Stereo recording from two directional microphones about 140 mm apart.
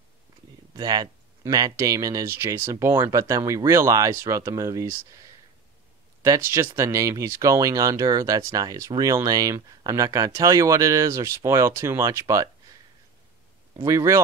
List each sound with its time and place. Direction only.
0.7 s speech: 30° right (ahead or behind)
13.8 s speech: 20° right (ahead or behind)